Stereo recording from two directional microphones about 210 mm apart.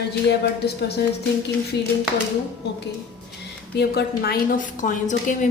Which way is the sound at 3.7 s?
50° left (ahead or behind).